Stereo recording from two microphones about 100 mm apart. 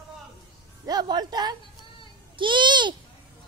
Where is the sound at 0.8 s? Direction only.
45° right (ahead or behind).